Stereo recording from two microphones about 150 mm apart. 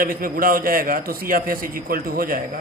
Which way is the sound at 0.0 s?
70° right (ahead or behind).